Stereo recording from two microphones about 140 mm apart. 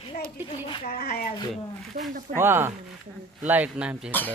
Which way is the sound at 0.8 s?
90° left.